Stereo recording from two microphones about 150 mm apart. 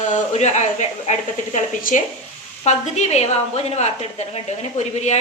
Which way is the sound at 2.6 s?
45° left (ahead or behind).